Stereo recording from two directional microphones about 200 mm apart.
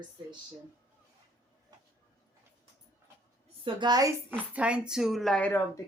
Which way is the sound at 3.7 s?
20° right (ahead or behind).